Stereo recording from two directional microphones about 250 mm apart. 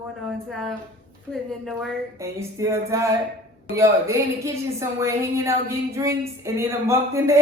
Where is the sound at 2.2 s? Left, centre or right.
Centre.